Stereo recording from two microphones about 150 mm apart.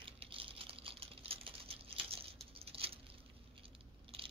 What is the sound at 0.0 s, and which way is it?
Typing, 35° right (ahead or behind).